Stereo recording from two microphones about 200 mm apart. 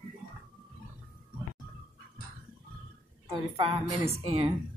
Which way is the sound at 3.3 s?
25° right (ahead or behind).